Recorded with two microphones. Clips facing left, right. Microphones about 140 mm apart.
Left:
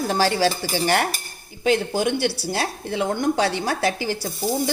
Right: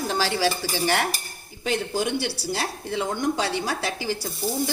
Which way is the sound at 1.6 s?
65° left (ahead or behind).